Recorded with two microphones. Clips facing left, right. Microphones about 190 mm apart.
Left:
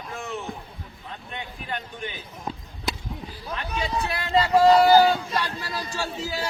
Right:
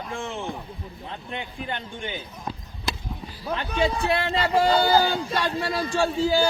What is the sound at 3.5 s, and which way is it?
A man's voice, 30° right (ahead or behind).